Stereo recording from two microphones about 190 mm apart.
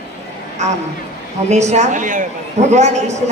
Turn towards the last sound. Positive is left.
turn(degrees=-35)  # may be behind; listen again after turning